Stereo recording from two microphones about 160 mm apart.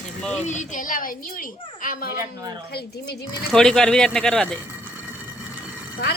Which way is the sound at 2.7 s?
80° left.